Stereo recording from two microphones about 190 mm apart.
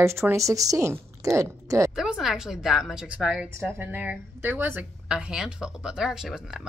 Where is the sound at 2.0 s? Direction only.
Centre (ahead or behind).